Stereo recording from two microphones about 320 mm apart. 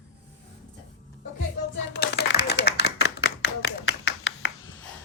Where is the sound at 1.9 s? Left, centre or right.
Left.